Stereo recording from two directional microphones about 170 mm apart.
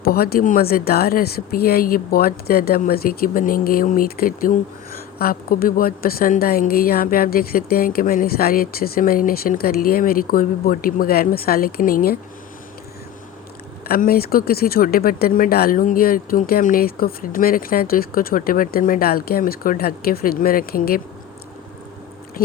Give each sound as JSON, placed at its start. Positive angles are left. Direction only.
{"t": 0.0, "sound": "speech", "side_deg": 65}
{"t": 13.8, "sound": "speech", "side_deg": 60}
{"t": 22.4, "sound": "a sound", "side_deg": 60}